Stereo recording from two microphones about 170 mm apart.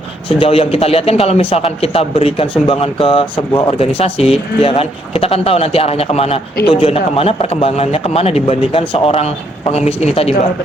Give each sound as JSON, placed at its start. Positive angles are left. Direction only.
{"t": 0.3, "sound": "speech", "side_deg": 30}